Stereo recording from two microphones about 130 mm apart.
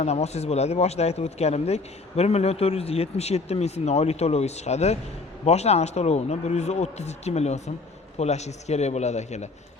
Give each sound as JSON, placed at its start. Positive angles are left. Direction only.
{"t": 0.0, "sound": "speech", "side_deg": 55}